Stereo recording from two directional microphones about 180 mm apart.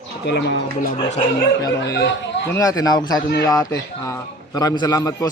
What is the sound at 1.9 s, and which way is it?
Speech, 75° left (ahead or behind).